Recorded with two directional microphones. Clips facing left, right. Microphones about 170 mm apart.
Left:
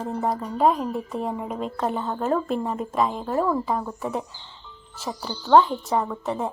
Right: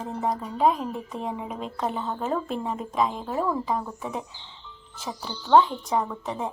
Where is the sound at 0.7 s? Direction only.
40° left (ahead or behind).